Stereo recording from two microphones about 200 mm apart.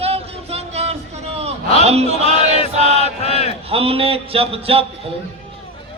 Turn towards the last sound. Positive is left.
turn(degrees=-30)  # may be behind; listen again after turning